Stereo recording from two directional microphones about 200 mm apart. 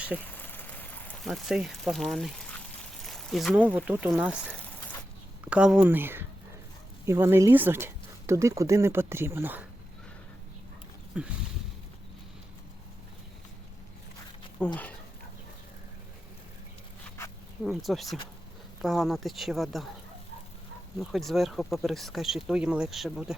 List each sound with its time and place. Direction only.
0.3 s a sound: 10° left (ahead or behind)
3.0 s speech: centre (ahead or behind)
11.1 s speech: 5° right (ahead or behind)
14.6 s speech: 10° left (ahead or behind)
17.6 s speech: centre (ahead or behind)
21.0 s speech: centre (ahead or behind)